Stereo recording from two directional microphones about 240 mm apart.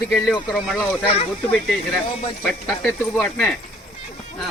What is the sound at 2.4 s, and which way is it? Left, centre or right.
Speech, centre.